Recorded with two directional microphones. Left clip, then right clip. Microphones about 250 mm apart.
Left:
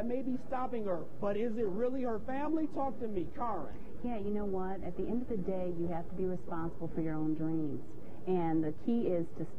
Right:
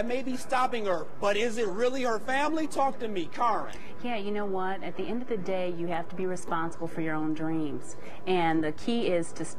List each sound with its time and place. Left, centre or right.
0.1 s a man's voice: centre